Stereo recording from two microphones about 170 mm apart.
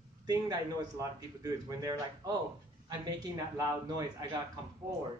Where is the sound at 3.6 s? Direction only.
25° right (ahead or behind).